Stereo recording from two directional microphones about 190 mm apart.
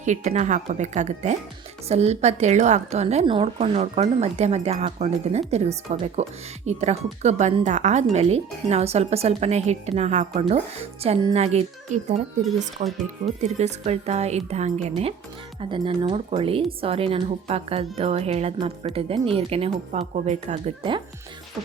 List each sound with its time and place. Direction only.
0.0 s speech: 40° right (ahead or behind)